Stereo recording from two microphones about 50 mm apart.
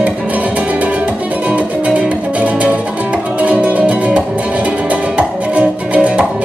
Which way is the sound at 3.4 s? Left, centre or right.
Right.